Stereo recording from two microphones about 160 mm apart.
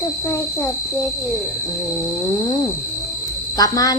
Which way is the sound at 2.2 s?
20° left (ahead or behind).